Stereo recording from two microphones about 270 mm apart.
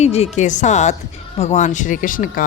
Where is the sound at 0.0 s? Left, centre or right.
Left.